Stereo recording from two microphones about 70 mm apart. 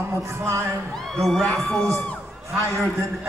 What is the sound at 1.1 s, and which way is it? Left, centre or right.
Speech, centre.